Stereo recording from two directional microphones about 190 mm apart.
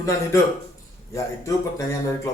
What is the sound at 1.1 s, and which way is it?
Speech, 15° left (ahead or behind).